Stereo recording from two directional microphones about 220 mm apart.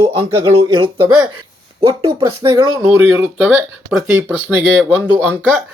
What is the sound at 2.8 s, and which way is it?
Speech, 10° right (ahead or behind).